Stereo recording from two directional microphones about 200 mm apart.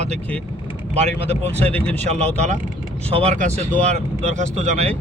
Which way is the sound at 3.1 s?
35° right (ahead or behind).